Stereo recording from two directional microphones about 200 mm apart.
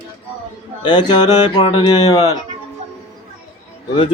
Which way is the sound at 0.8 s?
20° left (ahead or behind).